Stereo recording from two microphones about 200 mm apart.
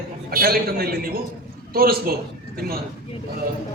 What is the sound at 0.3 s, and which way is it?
A man's voice, 50° right (ahead or behind).